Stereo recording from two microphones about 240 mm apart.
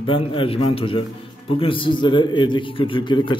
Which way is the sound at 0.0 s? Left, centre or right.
Left.